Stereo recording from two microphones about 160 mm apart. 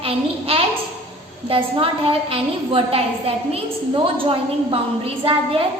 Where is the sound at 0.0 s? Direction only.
35° right (ahead or behind).